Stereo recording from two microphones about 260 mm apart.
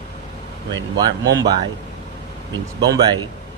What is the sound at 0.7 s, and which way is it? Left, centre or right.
Speech, centre.